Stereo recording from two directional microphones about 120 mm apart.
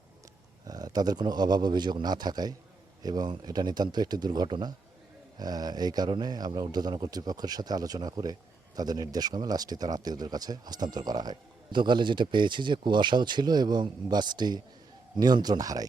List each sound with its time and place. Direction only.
0.7 s a man's voice: 30° right (ahead or behind)